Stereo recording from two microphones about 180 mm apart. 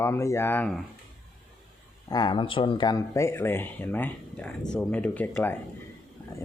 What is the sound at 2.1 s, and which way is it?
Speech, 25° left (ahead or behind).